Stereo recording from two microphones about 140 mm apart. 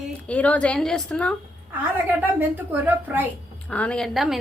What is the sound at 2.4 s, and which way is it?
Speech, 15° right (ahead or behind).